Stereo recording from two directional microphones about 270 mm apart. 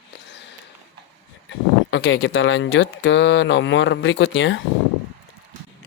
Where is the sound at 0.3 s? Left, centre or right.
Left.